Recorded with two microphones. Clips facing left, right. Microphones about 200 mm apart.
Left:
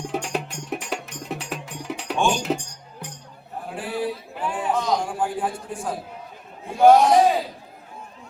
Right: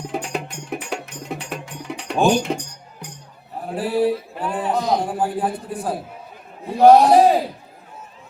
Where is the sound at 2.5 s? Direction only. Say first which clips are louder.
Even; centre (ahead or behind).